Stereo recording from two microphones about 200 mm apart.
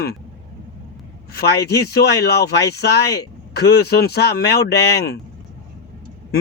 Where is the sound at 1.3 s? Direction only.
55° left (ahead or behind).